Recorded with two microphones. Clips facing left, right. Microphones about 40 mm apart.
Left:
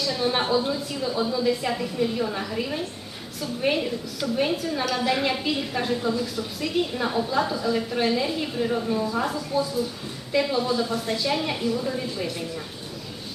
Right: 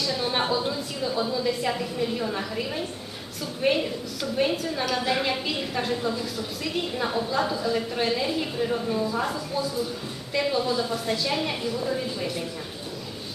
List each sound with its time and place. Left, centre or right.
0.0 s a woman's voice: centre